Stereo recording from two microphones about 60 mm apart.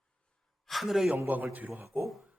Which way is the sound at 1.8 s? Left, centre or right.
Right.